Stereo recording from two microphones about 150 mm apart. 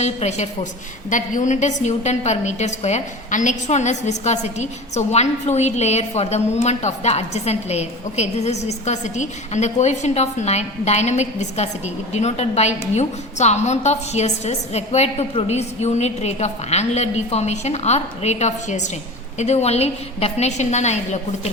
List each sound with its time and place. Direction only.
0.0 s a woman's voice: 50° left (ahead or behind)